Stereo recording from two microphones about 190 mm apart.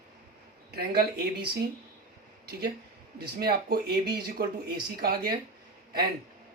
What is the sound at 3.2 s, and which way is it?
Speech, 55° right (ahead or behind).